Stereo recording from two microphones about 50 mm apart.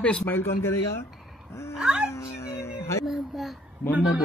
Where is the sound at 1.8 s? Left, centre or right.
Centre.